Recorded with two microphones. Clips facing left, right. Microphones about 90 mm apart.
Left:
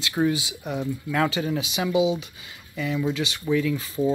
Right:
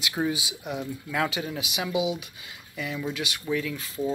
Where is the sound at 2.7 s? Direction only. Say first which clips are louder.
Left 6 dB; 5° right (ahead or behind).